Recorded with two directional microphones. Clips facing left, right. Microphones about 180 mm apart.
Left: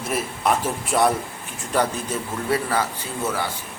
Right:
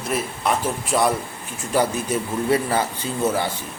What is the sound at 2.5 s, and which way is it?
Speech, 20° right (ahead or behind).